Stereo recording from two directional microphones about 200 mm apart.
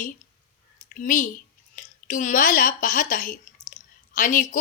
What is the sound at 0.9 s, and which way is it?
A woman's voice, 40° left (ahead or behind).